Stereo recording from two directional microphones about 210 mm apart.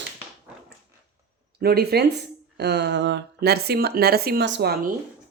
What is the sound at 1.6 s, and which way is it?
Speech, 50° right (ahead or behind).